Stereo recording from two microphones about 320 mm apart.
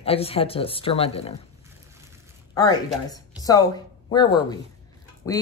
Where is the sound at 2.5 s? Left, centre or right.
Centre.